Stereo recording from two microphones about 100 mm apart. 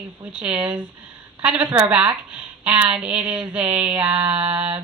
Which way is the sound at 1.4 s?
15° right (ahead or behind).